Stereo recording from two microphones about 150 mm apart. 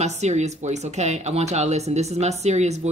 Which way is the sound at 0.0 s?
50° right (ahead or behind).